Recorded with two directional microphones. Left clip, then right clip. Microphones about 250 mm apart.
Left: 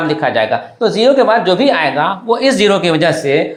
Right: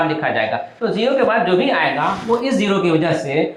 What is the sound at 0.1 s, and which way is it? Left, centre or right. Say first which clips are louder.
Speech: left 5 dB; left.